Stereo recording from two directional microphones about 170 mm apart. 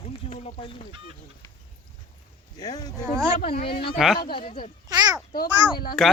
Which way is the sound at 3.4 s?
60° left (ahead or behind).